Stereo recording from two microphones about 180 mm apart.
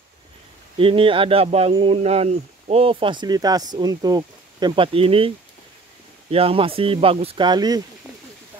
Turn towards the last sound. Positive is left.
turn(degrees=-20)  # may be behind; listen again after turning